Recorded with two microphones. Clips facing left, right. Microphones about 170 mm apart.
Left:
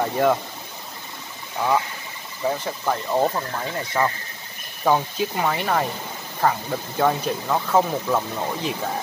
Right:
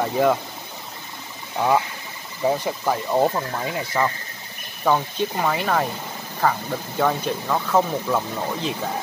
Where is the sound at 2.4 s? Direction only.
10° right (ahead or behind).